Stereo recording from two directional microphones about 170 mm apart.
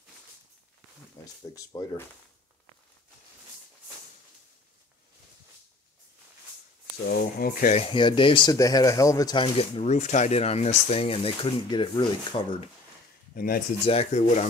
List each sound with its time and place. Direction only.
1.2 s speech: 25° left (ahead or behind)
7.1 s speech: 60° left (ahead or behind)
7.7 s speech: 30° left (ahead or behind)
13.3 s speech: 60° left (ahead or behind)
13.8 s speech: 40° left (ahead or behind)